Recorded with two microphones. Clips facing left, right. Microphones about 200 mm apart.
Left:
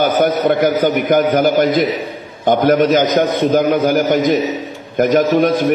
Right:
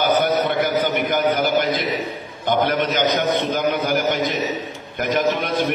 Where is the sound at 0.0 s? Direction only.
50° left (ahead or behind).